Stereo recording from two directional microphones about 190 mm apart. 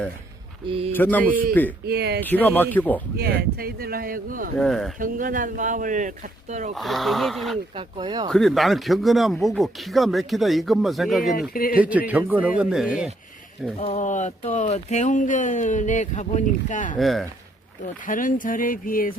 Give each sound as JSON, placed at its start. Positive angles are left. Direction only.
{"t": 0.9, "sound": "speech", "side_deg": 10}
{"t": 1.9, "sound": "speech", "side_deg": -60}
{"t": 2.2, "sound": "speech", "side_deg": 10}
{"t": 3.2, "sound": "speech", "side_deg": -55}
{"t": 4.5, "sound": "speech", "side_deg": 0}
{"t": 4.9, "sound": "speech", "side_deg": -45}
{"t": 6.7, "sound": "speech", "side_deg": 0}
{"t": 7.8, "sound": "speech", "side_deg": -25}
{"t": 8.3, "sound": "speech", "side_deg": 0}
{"t": 11.3, "sound": "speech", "side_deg": 50}
{"t": 11.8, "sound": "speech", "side_deg": -10}
{"t": 13.7, "sound": "speech", "side_deg": 35}
{"t": 17.0, "sound": "speech", "side_deg": 0}
{"t": 18.0, "sound": "speech", "side_deg": 45}